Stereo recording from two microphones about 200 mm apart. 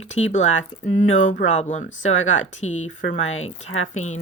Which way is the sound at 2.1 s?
75° left (ahead or behind).